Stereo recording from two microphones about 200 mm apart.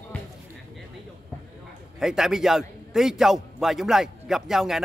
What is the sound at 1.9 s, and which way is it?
A man's voice, centre (ahead or behind).